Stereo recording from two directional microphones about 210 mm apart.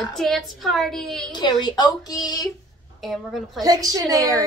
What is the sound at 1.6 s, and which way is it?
Speech, 20° left (ahead or behind).